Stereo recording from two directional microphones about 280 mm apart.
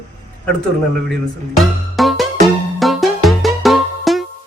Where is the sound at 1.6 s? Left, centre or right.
Centre.